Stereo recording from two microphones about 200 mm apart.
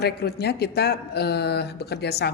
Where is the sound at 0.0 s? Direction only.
55° left (ahead or behind).